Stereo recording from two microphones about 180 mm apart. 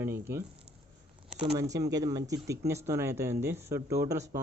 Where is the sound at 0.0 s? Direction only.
15° right (ahead or behind).